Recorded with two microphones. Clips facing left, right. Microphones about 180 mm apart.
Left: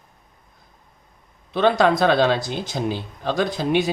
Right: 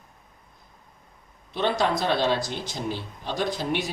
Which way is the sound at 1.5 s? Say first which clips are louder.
Left 7 dB; 65° left (ahead or behind).